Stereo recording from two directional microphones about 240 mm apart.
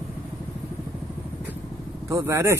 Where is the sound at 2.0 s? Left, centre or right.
Centre.